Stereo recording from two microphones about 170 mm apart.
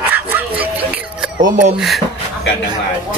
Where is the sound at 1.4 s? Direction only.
45° right (ahead or behind).